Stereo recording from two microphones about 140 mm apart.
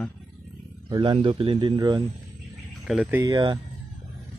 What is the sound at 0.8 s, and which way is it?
A man's voice, 30° right (ahead or behind).